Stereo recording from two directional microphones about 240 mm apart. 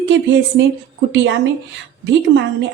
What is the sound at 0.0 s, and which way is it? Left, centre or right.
A woman's voice, right.